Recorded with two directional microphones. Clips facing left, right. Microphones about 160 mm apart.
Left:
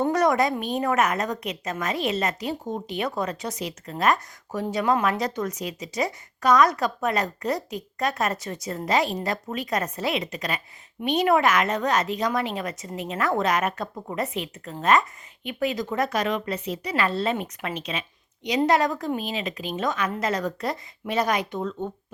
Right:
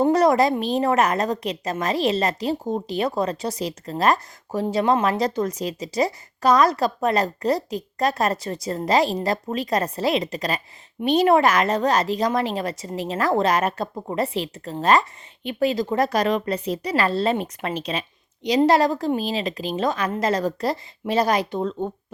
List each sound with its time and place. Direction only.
0.0 s speech: 30° right (ahead or behind)